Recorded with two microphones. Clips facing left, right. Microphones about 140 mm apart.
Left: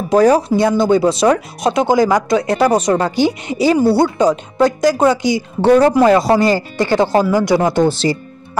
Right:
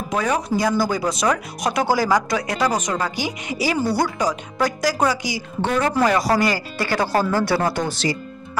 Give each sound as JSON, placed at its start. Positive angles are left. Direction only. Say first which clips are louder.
{"t": 0.1, "sound": "speech", "louder": "left 11 dB", "side_deg": 35}